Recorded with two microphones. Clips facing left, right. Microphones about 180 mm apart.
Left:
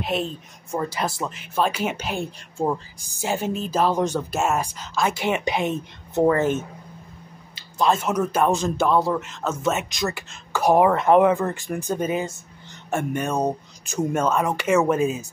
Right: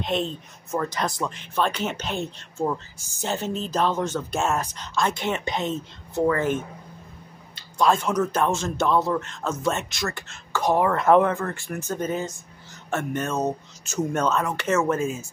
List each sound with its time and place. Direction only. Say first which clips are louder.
0.0 s speech: even; 10° left (ahead or behind)
6.2 s speech: left 3 dB; 25° left (ahead or behind)
7.7 s speech: even; 5° left (ahead or behind)
8.7 s speech: left 2 dB; 5° left (ahead or behind)
9.8 s speech: left 3 dB; 15° left (ahead or behind)